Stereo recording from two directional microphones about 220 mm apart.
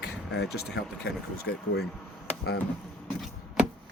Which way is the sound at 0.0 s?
50° left (ahead or behind).